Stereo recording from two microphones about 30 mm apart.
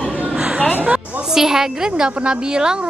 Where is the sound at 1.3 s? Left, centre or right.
Centre.